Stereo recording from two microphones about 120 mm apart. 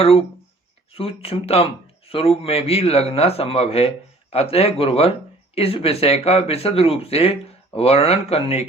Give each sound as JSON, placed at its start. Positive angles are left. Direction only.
{"t": 0.0, "sound": "a man's voice", "side_deg": 55}